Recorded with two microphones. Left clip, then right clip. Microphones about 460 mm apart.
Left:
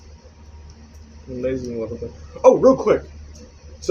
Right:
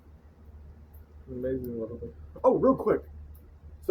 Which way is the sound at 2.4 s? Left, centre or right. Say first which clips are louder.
Left 10 dB; right.